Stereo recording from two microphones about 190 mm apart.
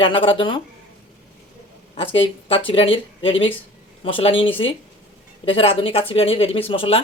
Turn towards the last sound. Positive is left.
turn(degrees=30)  # may be behind; listen again after turning